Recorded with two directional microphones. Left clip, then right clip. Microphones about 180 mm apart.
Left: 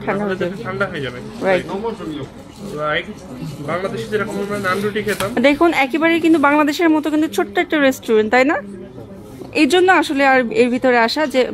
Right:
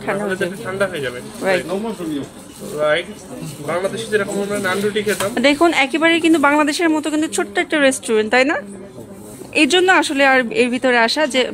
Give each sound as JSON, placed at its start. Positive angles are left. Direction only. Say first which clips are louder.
{"t": 0.0, "sound": "speech", "louder": "even", "side_deg": 5}
{"t": 2.8, "sound": "a man's voice", "louder": "right 3 dB", "side_deg": 5}